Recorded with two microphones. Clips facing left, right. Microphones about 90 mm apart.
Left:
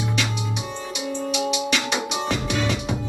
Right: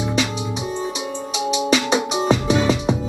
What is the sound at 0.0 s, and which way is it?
Music, 20° right (ahead or behind).